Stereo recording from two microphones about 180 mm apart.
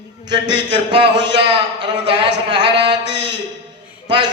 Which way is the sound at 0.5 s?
30° right (ahead or behind).